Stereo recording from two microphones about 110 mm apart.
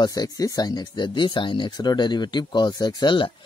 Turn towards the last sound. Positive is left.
turn(degrees=50)  # may be behind; listen again after turning